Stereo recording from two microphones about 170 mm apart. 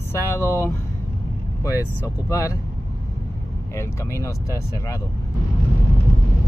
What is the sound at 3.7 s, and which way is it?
Speech, 15° left (ahead or behind).